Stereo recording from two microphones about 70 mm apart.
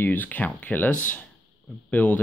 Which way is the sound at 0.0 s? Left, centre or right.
Left.